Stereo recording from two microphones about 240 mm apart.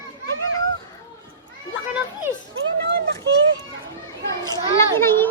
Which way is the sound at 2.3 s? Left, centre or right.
Centre.